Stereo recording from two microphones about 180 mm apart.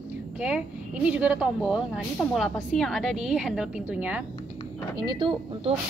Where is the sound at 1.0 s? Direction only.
5° right (ahead or behind).